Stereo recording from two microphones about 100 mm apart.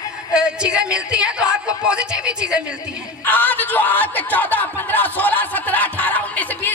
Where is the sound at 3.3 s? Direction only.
20° left (ahead or behind).